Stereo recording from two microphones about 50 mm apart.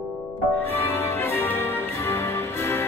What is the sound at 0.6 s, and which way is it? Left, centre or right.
Music, left.